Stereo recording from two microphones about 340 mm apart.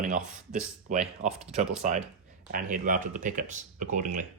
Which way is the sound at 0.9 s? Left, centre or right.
Right.